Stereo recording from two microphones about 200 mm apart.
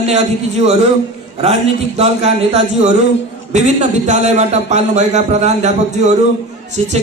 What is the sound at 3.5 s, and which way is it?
A man's voice, 35° right (ahead or behind).